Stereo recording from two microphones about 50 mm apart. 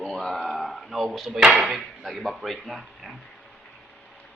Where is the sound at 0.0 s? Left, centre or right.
Centre.